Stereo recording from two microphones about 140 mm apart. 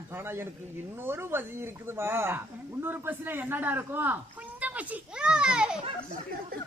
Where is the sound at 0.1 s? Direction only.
15° right (ahead or behind).